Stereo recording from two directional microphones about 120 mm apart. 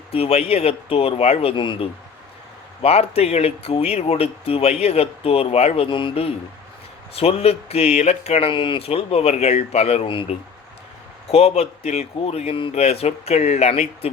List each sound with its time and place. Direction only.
0.1 s speech: 55° left (ahead or behind)
2.8 s speech: 60° left (ahead or behind)
11.3 s speech: 60° left (ahead or behind)
12.7 s speech: 60° left (ahead or behind)